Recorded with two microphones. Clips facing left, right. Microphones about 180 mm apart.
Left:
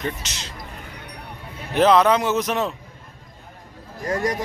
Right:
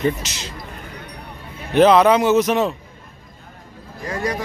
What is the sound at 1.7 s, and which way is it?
A man's voice, centre (ahead or behind).